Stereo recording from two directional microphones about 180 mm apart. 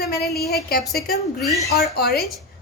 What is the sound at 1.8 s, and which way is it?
Speech, 60° left (ahead or behind).